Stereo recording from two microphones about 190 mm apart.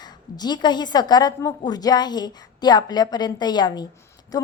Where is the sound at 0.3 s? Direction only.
20° left (ahead or behind).